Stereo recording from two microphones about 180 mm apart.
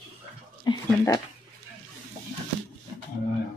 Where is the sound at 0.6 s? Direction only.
25° left (ahead or behind).